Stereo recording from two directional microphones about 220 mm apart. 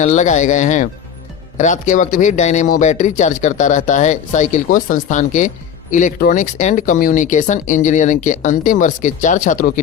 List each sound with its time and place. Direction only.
0.0 s a man's voice: 35° left (ahead or behind)